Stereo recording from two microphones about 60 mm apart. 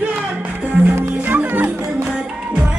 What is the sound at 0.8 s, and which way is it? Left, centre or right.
Music, right.